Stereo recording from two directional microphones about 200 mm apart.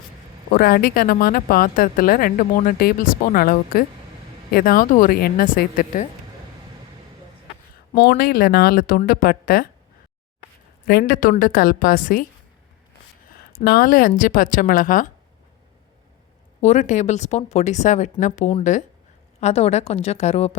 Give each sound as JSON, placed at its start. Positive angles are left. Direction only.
{"t": 0.5, "sound": "speech", "side_deg": 50}
{"t": 7.9, "sound": "speech", "side_deg": 50}
{"t": 10.8, "sound": "speech", "side_deg": 50}
{"t": 13.7, "sound": "speech", "side_deg": 45}
{"t": 16.6, "sound": "speech", "side_deg": 35}